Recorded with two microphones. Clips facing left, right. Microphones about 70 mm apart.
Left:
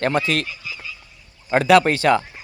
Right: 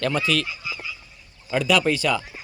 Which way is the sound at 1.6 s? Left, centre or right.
Left.